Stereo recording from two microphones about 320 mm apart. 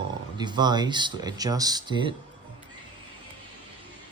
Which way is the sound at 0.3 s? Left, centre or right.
Centre.